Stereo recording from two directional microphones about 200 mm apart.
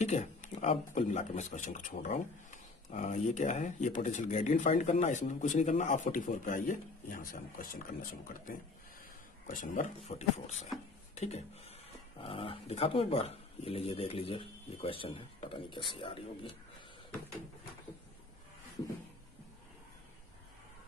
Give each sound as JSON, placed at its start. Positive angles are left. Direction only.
{"t": 0.0, "sound": "speech", "side_deg": 35}